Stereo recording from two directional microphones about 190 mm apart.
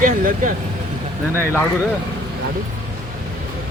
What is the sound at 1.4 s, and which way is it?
Speech, 10° left (ahead or behind).